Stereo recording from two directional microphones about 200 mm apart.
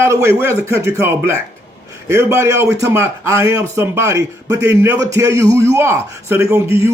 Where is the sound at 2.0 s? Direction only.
15° right (ahead or behind).